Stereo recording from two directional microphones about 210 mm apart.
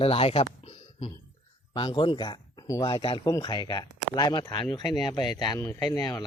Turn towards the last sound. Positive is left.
turn(degrees=20)  # may be behind; listen again after turning